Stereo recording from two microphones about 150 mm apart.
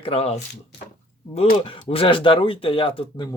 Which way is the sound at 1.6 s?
35° left (ahead or behind).